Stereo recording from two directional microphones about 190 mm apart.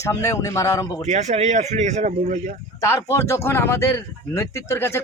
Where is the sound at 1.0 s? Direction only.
35° right (ahead or behind).